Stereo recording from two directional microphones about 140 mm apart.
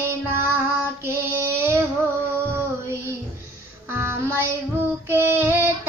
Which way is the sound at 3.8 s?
20° right (ahead or behind).